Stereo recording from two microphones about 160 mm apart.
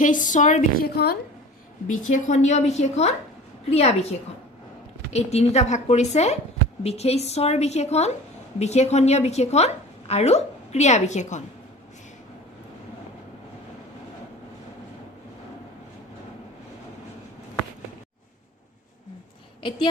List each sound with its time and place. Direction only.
0.0 s a woman's voice: 55° left (ahead or behind)
0.9 s a woman's voice: 80° left
1.9 s a woman's voice: 55° left (ahead or behind)
5.1 s a woman's voice: 40° left (ahead or behind)